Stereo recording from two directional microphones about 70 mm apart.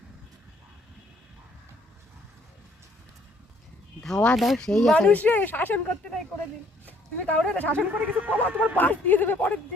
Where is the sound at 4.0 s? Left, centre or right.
Centre.